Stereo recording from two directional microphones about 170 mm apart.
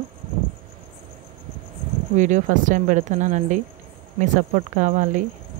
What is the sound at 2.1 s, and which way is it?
Speech, 45° right (ahead or behind).